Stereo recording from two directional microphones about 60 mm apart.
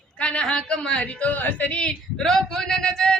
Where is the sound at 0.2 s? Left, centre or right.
Centre.